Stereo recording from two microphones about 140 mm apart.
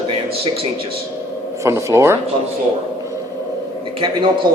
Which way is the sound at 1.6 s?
20° right (ahead or behind).